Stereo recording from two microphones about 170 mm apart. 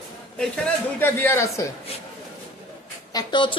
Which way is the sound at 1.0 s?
15° left (ahead or behind).